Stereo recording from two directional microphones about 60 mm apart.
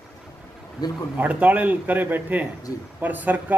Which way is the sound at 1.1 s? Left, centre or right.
Right.